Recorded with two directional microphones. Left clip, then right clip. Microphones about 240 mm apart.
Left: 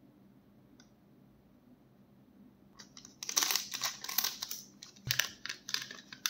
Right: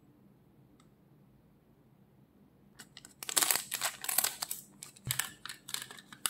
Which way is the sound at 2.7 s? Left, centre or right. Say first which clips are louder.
Right 1 dB; centre.